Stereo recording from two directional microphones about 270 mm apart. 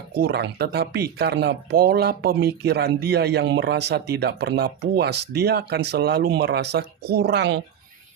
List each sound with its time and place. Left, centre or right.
0.1 s speech: right